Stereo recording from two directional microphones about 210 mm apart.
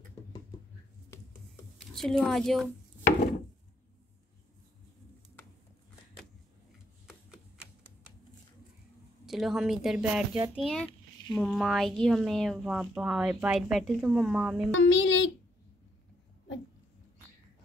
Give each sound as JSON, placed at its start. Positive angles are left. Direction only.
{"t": 1.8, "sound": "a woman's voice", "side_deg": 0}
{"t": 7.1, "sound": "a sound", "side_deg": -5}
{"t": 9.2, "sound": "speech", "side_deg": 0}
{"t": 14.8, "sound": "a child's voice", "side_deg": 60}